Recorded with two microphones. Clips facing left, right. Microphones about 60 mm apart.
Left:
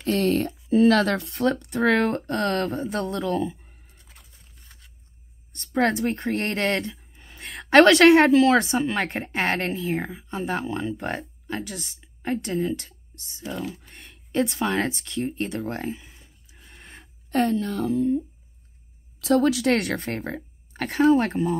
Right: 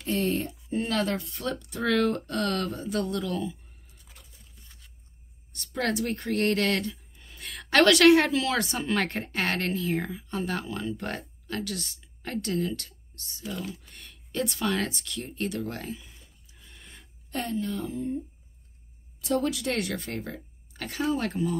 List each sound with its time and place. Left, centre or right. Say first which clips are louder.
0.0 s speech: left 5 dB; left
5.5 s a woman's voice: left 7 dB; left
8.7 s speech: left 4 dB; centre
9.2 s speech: left 4 dB; left
13.7 s speech: left 4 dB; left
16.5 s a sound: left 5 dB; left
19.2 s speech: left 7 dB; left
19.7 s speech: left 7 dB; left
20.0 s speech: left 5 dB; left